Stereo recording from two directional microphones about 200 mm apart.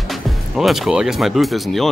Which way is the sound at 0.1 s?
Centre (ahead or behind).